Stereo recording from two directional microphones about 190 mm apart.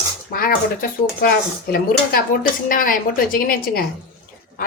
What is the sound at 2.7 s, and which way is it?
A woman's voice, 45° left (ahead or behind).